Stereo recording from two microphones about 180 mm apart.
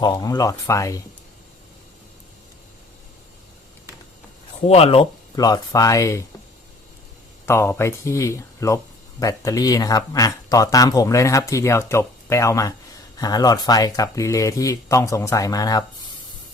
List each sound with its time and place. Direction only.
0.0 s speech: 20° left (ahead or behind)
4.6 s speech: 35° left (ahead or behind); by 6.2 s 15° left (ahead or behind)
7.4 s speech: 15° left (ahead or behind)